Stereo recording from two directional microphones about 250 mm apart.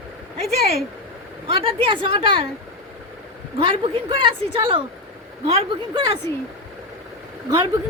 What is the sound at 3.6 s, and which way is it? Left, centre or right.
Speech, centre.